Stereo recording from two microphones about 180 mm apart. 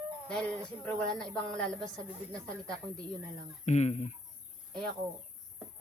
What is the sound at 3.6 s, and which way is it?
Speech, 40° left (ahead or behind).